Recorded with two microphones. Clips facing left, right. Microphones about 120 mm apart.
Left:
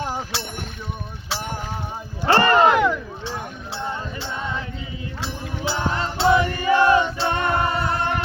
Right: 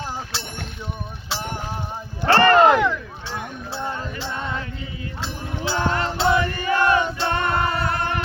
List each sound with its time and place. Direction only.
2.2 s speech: 15° left (ahead or behind)
5.2 s music: 15° left (ahead or behind)